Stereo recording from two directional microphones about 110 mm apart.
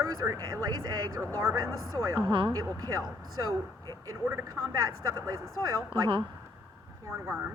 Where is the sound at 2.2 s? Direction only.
50° right (ahead or behind).